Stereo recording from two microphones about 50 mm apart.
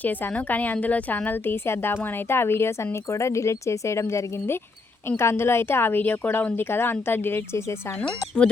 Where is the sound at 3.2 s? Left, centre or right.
Left.